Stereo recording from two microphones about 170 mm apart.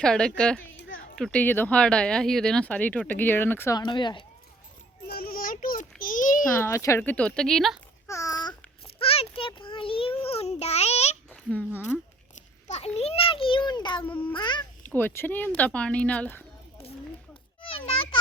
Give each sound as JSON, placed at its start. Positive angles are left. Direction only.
{"t": 0.0, "sound": "speech", "side_deg": 5}
{"t": 3.8, "sound": "speech", "side_deg": 25}
{"t": 5.0, "sound": "a sound", "side_deg": 65}
{"t": 6.6, "sound": "speech", "side_deg": 15}
{"t": 8.0, "sound": "babbling", "side_deg": 20}
{"t": 9.0, "sound": "a sound", "side_deg": 35}
{"t": 11.4, "sound": "speech", "side_deg": 10}
{"t": 12.6, "sound": "a sound", "side_deg": 40}
{"t": 14.3, "sound": "speech", "side_deg": 25}
{"t": 14.8, "sound": "speech", "side_deg": 10}
{"t": 17.6, "sound": "children playing", "side_deg": 30}